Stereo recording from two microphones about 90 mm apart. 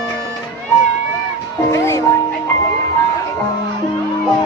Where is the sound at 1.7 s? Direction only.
35° left (ahead or behind).